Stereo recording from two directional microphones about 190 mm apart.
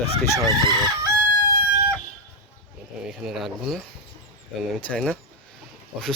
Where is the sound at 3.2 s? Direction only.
Centre (ahead or behind).